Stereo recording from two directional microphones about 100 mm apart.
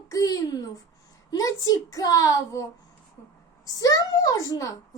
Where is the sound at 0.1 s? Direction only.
35° left (ahead or behind).